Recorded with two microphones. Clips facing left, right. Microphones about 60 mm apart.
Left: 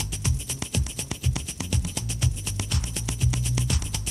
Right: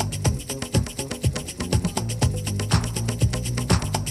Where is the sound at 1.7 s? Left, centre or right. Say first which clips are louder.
Right 7 dB; right.